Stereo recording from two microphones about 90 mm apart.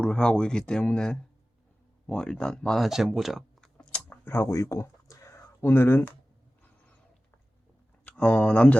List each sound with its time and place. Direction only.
0.0 s speech: 10° left (ahead or behind)
3.8 s chewing: 10° left (ahead or behind)
4.2 s speech: 25° left (ahead or behind)
8.0 s speech: 15° left (ahead or behind)